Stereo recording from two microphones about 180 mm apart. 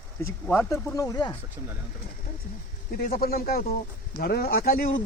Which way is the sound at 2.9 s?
55° left (ahead or behind).